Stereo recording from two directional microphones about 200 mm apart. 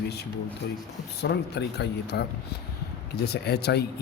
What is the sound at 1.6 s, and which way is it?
Speech, 55° left (ahead or behind).